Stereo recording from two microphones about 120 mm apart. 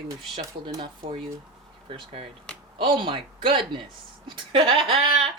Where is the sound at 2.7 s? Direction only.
45° right (ahead or behind).